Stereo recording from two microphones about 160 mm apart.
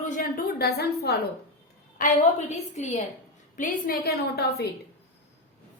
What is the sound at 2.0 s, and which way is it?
A woman's voice, 50° left (ahead or behind).